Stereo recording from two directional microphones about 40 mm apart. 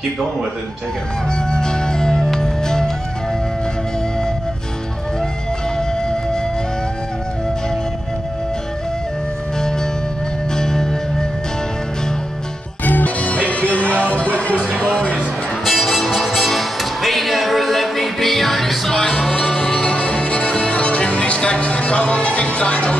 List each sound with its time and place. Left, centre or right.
1.3 s music: centre
5.8 s music: centre
10.5 s music: centre
12.8 s music: left
15.6 s music: centre
18.9 s music: centre
19.9 s music: left